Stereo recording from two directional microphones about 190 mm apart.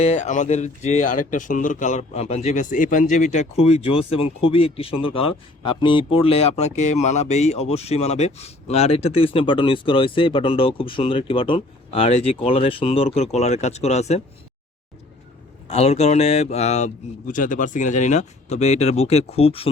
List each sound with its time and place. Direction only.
0.0 s a man's voice: 40° left (ahead or behind)
15.6 s a man's voice: 35° left (ahead or behind)